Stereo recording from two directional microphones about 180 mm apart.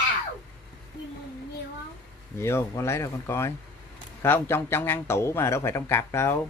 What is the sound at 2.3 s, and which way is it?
A man's voice, 15° left (ahead or behind).